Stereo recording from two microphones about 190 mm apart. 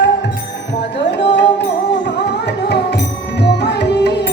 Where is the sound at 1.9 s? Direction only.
65° left (ahead or behind).